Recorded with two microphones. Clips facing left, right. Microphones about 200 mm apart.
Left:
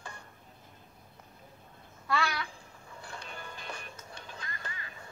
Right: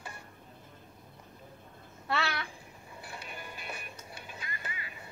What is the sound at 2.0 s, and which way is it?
Babbling, 25° right (ahead or behind).